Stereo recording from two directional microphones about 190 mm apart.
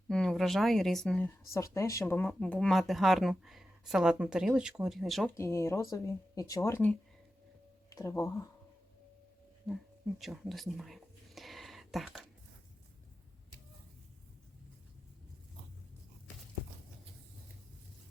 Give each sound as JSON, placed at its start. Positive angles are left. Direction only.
{"t": 0.1, "sound": "speech", "side_deg": 0}
{"t": 1.5, "sound": "speech", "side_deg": 15}
{"t": 5.4, "sound": "speech", "side_deg": 15}
{"t": 9.7, "sound": "speech", "side_deg": 5}
{"t": 10.2, "sound": "a sound", "side_deg": 0}